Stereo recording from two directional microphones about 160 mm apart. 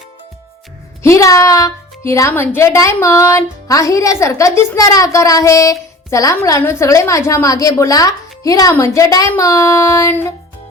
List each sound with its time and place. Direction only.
1.0 s speech: 20° left (ahead or behind)